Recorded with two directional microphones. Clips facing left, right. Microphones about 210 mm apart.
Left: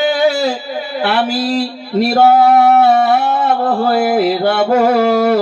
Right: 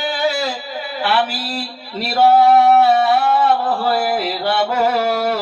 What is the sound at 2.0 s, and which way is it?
Speech, 50° left (ahead or behind).